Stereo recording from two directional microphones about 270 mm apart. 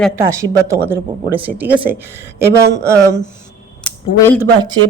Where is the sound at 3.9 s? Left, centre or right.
Centre.